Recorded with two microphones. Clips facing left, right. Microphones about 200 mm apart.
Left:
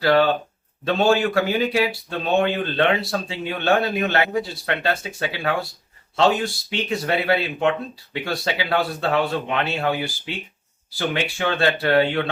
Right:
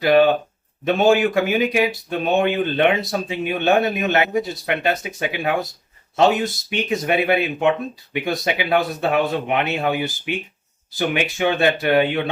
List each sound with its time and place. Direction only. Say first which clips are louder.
0.0 s a man's voice: right 3 dB; 20° right (ahead or behind)
10.9 s a man's voice: right 3 dB; 15° right (ahead or behind)